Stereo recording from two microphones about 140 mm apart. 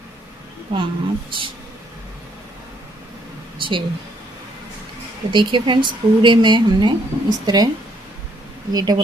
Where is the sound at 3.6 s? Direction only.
35° right (ahead or behind).